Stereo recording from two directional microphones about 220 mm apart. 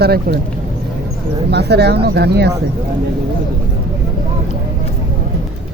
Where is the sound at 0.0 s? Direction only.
45° right (ahead or behind).